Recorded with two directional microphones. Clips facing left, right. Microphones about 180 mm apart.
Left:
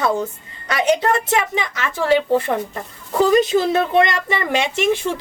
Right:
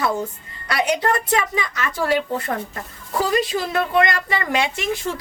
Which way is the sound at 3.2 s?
25° left (ahead or behind).